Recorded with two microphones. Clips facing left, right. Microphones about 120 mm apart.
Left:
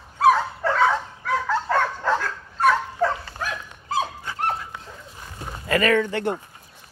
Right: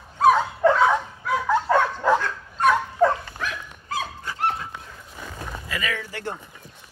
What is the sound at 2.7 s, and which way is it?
Dog, 15° right (ahead or behind).